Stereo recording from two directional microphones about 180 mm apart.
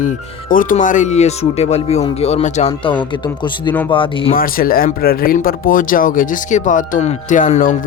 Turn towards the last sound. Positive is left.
turn(degrees=45)  # may be behind; listen again after turning